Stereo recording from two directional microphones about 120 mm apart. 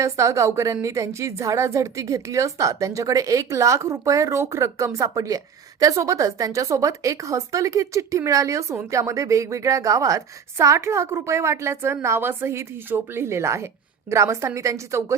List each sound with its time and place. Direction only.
0.0 s a woman's voice: 25° right (ahead or behind)